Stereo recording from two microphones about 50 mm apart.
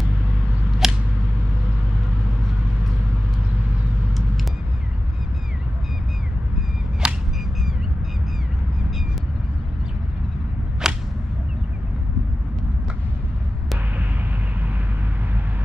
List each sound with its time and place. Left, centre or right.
0.8 s a sound: centre
7.0 s whip: centre
10.8 s whip: centre